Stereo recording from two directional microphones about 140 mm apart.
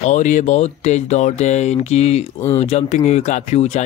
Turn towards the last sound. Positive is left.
turn(degrees=50)  # may be behind; listen again after turning